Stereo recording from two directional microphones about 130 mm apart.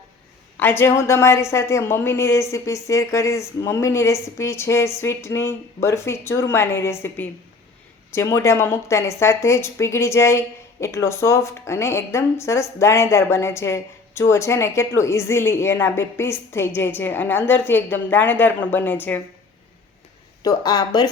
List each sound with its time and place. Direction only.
0.6 s speech: 15° left (ahead or behind)
20.4 s speech: 30° left (ahead or behind)